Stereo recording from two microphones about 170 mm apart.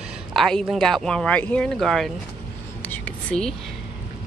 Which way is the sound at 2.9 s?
5° left (ahead or behind).